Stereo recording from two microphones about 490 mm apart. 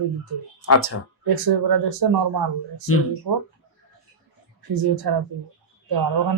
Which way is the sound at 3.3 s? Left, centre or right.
Right.